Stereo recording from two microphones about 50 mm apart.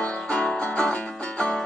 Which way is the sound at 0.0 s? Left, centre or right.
Left.